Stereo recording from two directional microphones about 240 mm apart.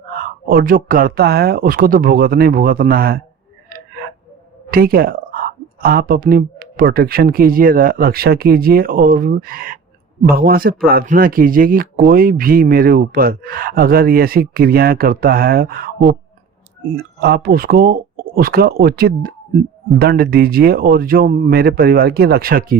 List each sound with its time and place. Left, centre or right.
0.4 s speech: right
4.7 s speech: right